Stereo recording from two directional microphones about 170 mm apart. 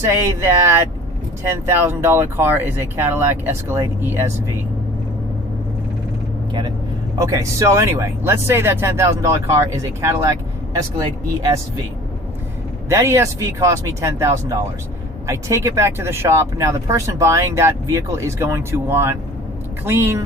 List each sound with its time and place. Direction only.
0.1 s speech: 15° right (ahead or behind)
6.5 s speech: 25° right (ahead or behind)
12.9 s speech: 15° right (ahead or behind)